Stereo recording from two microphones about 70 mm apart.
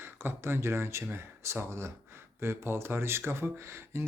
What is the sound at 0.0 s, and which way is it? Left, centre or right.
Speech, right.